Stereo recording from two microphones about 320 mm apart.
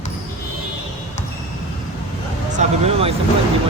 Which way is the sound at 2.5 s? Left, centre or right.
Centre.